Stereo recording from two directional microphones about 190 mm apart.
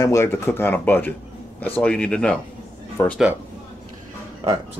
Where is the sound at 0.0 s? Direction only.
15° left (ahead or behind).